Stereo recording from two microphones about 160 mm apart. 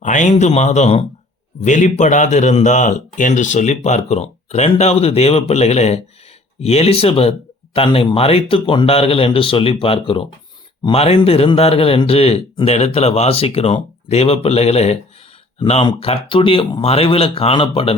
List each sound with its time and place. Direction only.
0.0 s a man's voice: 50° left (ahead or behind)